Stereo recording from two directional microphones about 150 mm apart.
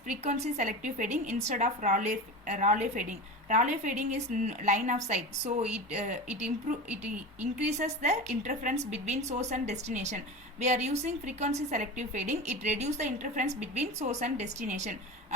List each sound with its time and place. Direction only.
0.1 s a woman's voice: 50° right (ahead or behind)
6.8 s a woman's voice: 10° right (ahead or behind)
7.8 s a woman's voice: 50° right (ahead or behind)